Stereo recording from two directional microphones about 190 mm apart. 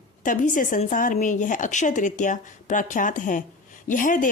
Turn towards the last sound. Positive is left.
turn(degrees=45)  # may be behind; listen again after turning